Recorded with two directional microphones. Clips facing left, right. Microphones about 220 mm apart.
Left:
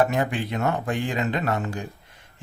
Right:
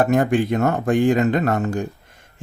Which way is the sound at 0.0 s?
50° right (ahead or behind).